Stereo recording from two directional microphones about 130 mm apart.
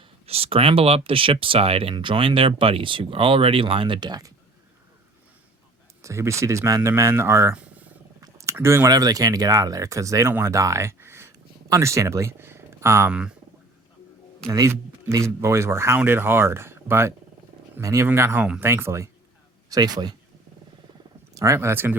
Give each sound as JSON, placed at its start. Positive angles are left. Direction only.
{"t": 0.3, "sound": "speech", "side_deg": -50}
{"t": 6.0, "sound": "speech", "side_deg": -25}
{"t": 7.5, "sound": "purr", "side_deg": -10}
{"t": 8.2, "sound": "speech", "side_deg": -25}
{"t": 14.4, "sound": "speech", "side_deg": -25}
{"t": 21.3, "sound": "speech", "side_deg": -25}